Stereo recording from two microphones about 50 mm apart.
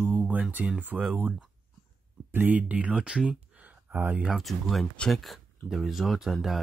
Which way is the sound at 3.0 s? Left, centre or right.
Centre.